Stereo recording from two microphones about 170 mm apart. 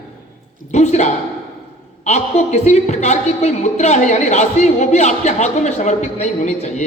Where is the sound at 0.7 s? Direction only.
45° left (ahead or behind).